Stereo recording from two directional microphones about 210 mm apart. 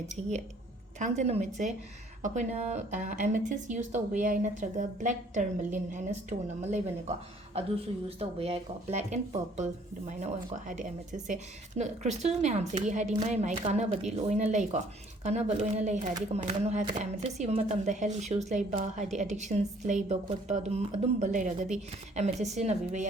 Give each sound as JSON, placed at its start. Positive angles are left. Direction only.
{"t": 0.2, "sound": "a woman's voice", "side_deg": -30}
{"t": 8.2, "sound": "a woman's voice", "side_deg": -30}